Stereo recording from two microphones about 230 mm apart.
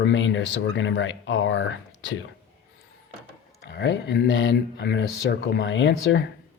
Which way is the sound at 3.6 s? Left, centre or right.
Left.